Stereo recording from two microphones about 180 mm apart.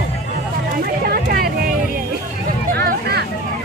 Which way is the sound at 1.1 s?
55° right (ahead or behind).